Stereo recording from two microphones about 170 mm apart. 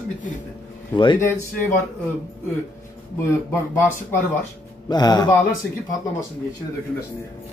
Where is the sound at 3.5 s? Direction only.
15° left (ahead or behind).